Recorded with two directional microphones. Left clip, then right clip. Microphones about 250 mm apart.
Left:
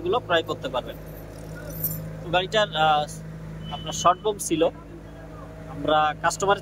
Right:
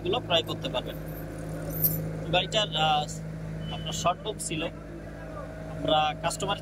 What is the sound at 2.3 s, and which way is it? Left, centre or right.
Speech, centre.